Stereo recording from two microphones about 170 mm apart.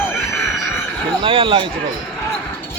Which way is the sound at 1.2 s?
30° right (ahead or behind).